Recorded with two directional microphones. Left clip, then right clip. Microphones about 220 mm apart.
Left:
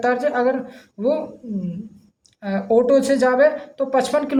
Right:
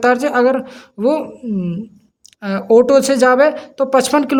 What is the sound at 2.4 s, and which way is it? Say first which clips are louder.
A woman's voice: right 6 dB; 45° right (ahead or behind).